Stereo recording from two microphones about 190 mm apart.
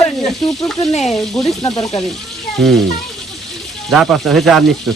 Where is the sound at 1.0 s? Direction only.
Centre (ahead or behind).